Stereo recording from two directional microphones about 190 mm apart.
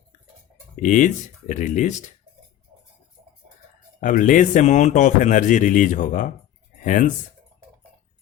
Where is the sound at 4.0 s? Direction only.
40° left (ahead or behind).